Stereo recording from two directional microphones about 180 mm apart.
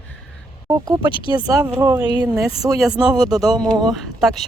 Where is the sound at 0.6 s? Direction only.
20° right (ahead or behind).